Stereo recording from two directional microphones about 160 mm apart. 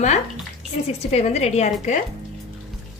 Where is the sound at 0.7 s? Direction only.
45° left (ahead or behind).